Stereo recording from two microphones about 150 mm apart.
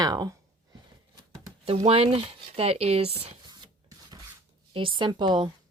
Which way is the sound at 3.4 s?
30° right (ahead or behind).